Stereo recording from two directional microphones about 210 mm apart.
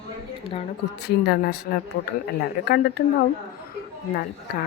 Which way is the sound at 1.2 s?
50° left (ahead or behind).